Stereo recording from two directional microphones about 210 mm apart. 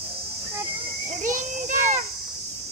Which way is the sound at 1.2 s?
35° right (ahead or behind).